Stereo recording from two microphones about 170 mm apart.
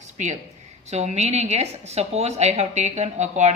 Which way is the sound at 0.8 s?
40° right (ahead or behind).